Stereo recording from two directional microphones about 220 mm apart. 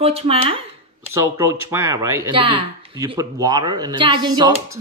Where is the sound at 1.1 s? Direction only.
10° right (ahead or behind).